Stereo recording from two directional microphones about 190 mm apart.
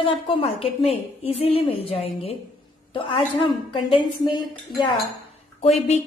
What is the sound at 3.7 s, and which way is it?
Speech, 25° left (ahead or behind).